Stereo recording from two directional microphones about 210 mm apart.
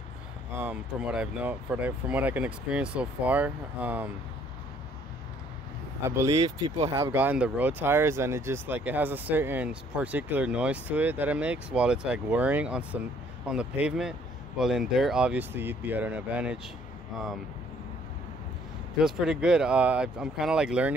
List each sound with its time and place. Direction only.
0.6 s speech: 5° right (ahead or behind)
6.0 s speech: 15° right (ahead or behind)
6.3 s speech: 30° right (ahead or behind)
6.9 s speech: 15° right (ahead or behind)
18.9 s speech: 5° right (ahead or behind)